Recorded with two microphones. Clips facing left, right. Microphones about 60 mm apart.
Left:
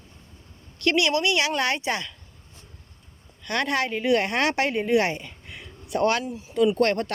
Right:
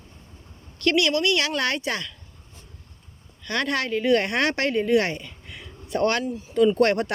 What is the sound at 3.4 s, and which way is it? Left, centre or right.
Speech, centre.